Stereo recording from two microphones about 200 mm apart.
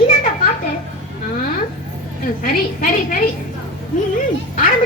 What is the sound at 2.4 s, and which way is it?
Speech, 45° left (ahead or behind).